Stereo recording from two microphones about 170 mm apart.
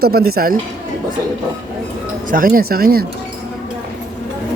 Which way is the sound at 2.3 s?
55° right (ahead or behind).